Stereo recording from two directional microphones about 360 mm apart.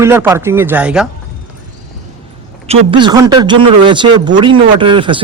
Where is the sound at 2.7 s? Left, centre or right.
Centre.